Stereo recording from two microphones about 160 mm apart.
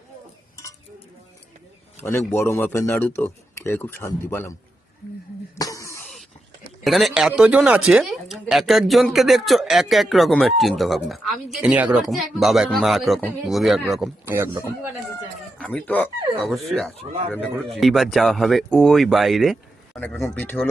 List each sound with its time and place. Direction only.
2.0 s speech: 15° left (ahead or behind)
5.5 s a sound: 20° left (ahead or behind)
6.8 s speech: centre (ahead or behind)
14.3 s speech: 15° right (ahead or behind)
15.5 s speech: 5° left (ahead or behind)